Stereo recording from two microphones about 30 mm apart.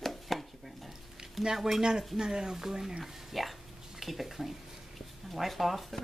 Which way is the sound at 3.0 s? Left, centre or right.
Centre.